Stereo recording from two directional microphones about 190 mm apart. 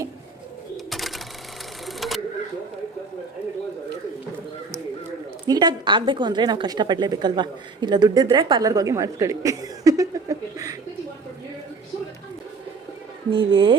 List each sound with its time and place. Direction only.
0.9 s a sound: centre (ahead or behind)
5.5 s a woman's voice: 20° right (ahead or behind)
13.3 s a woman's voice: 25° right (ahead or behind)